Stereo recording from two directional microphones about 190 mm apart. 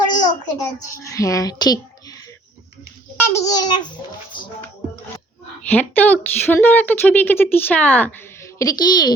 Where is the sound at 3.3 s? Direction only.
20° left (ahead or behind).